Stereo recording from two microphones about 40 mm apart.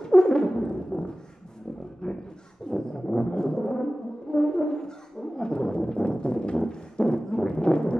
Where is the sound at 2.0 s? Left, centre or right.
Centre.